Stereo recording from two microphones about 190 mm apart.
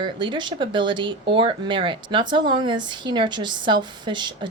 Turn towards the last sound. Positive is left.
turn(degrees=-25)  # may be behind; listen again after turning